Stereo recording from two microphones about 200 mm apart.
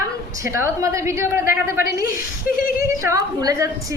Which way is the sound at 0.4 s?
15° right (ahead or behind).